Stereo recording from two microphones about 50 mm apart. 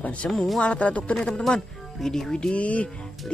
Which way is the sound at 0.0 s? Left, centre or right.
Left.